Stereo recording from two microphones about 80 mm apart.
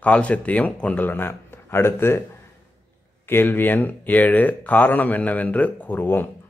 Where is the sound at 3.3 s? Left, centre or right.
Left.